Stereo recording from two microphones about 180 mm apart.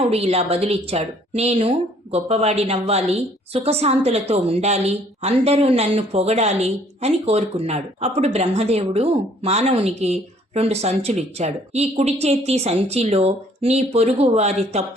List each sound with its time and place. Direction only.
0.0 s a woman's voice: 35° right (ahead or behind)